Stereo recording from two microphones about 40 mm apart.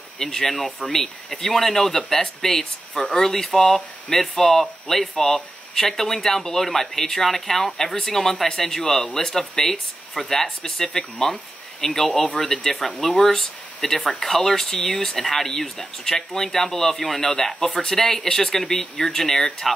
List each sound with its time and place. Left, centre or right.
0.2 s speech: centre
12.4 s speech: centre
17.2 s speech: centre